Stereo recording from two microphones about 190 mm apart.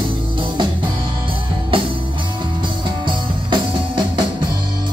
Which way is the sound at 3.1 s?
25° right (ahead or behind).